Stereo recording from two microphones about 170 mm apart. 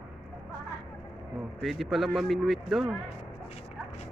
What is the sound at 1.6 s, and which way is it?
Speech, centre (ahead or behind).